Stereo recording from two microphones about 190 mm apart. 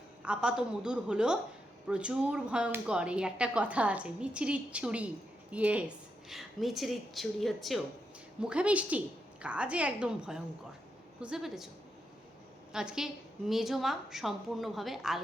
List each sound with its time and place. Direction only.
0.2 s a woman's voice: 5° right (ahead or behind)
12.7 s speech: 5° right (ahead or behind)